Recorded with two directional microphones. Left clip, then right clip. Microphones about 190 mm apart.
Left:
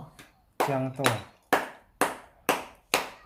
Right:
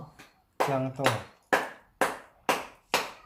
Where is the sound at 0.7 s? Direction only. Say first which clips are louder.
Even; 5° left (ahead or behind).